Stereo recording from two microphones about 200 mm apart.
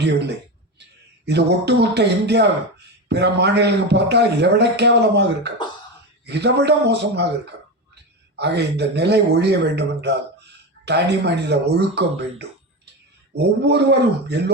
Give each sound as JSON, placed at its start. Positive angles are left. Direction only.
{"t": 1.2, "sound": "a man's voice", "side_deg": -55}
{"t": 8.4, "sound": "a man's voice", "side_deg": -55}